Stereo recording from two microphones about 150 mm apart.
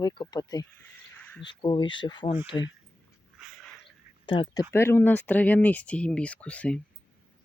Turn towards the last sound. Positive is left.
turn(degrees=10)  # may be behind; listen again after turning